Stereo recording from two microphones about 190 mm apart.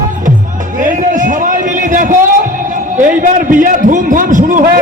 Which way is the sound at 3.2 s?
45° right (ahead or behind).